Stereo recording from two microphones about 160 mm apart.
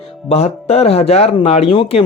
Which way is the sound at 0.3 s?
40° left (ahead or behind).